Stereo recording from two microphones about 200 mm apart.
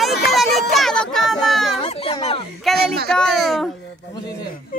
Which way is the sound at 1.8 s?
30° left (ahead or behind).